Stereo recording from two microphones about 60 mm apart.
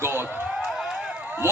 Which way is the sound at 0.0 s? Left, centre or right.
Right.